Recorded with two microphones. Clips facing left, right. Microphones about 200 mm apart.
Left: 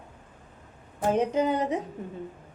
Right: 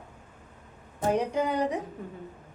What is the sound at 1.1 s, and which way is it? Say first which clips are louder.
Speech: left 2 dB; 20° left (ahead or behind).